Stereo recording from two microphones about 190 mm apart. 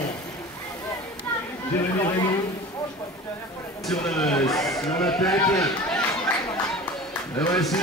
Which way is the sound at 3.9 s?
5° left (ahead or behind).